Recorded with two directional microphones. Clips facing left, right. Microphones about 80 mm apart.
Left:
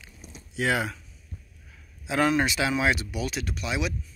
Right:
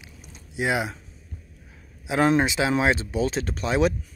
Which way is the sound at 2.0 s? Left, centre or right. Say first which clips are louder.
Right 3 dB; right.